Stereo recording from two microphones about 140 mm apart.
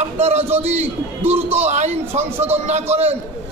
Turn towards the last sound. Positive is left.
turn(degrees=-50)  # may be behind; listen again after turning